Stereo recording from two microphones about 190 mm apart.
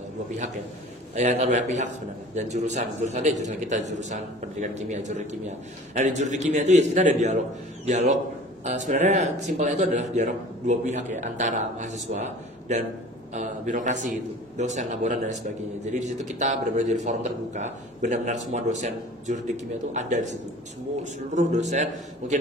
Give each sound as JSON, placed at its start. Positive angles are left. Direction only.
{"t": 1.1, "sound": "a man's voice", "side_deg": -35}